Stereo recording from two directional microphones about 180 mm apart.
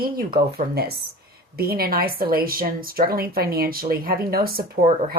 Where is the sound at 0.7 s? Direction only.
60° right (ahead or behind).